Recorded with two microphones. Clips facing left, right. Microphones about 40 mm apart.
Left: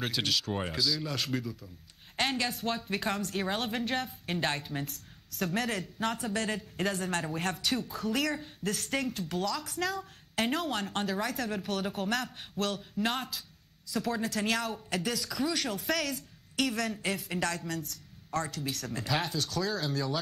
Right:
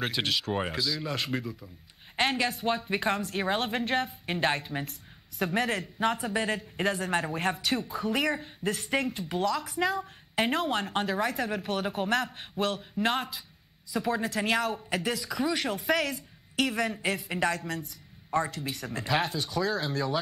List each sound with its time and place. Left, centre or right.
0.0 s speech: centre